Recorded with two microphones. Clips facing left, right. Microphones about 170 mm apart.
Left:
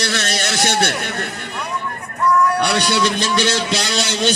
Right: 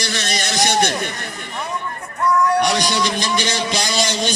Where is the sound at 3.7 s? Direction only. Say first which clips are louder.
Even; 65° left (ahead or behind).